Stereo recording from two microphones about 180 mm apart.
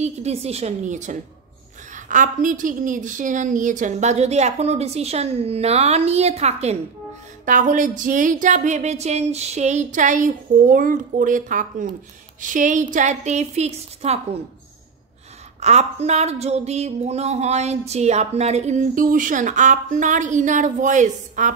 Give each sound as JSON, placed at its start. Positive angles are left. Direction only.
{"t": 0.0, "sound": "speech", "side_deg": -35}
{"t": 7.4, "sound": "a sound", "side_deg": -45}
{"t": 12.4, "sound": "speech", "side_deg": -45}
{"t": 15.6, "sound": "speech", "side_deg": -40}